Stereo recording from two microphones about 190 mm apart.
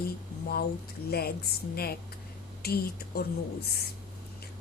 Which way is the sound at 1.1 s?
55° left (ahead or behind).